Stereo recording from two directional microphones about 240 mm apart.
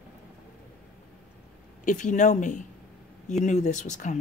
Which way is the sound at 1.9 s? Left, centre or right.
Left.